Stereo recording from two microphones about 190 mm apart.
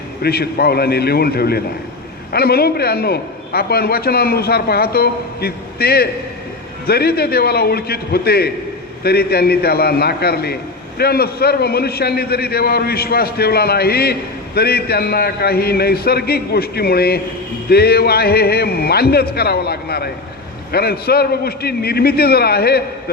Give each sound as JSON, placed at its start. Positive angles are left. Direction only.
{"t": 0.2, "sound": "a man's voice", "side_deg": 55}